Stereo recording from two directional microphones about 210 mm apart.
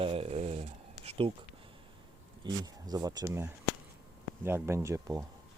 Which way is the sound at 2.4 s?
20° right (ahead or behind).